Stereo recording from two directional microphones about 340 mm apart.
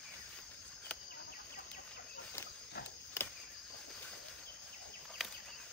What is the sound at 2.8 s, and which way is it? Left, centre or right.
Cricket, left.